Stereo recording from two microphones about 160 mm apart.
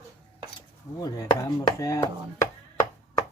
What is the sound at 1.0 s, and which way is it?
Chop, 20° left (ahead or behind).